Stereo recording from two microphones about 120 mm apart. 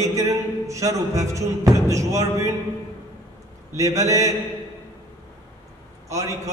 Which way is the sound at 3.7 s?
25° right (ahead or behind).